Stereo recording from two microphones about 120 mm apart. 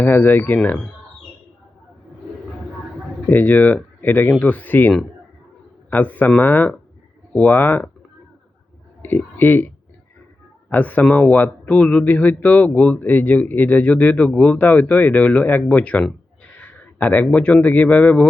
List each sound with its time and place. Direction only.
0.0 s speech: 15° left (ahead or behind)
3.2 s speech: 15° left (ahead or behind)
9.0 s speech: 15° left (ahead or behind)